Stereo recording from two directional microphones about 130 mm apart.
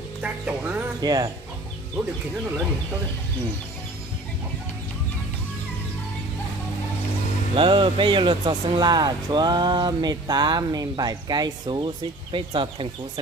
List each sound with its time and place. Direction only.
0.2 s music: 10° right (ahead or behind)
1.0 s speech: 30° right (ahead or behind)
7.5 s speech: 40° right (ahead or behind)